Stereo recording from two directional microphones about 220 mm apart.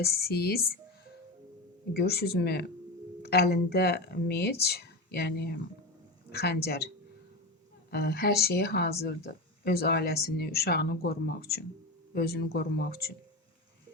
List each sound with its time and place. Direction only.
0.0 s speech: 45° left (ahead or behind)
1.9 s speech: 45° left (ahead or behind)
7.9 s speech: 45° left (ahead or behind)